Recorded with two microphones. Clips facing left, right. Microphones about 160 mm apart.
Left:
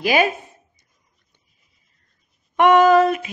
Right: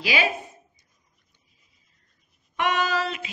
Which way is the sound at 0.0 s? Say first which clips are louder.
Left 7 dB; 50° left (ahead or behind).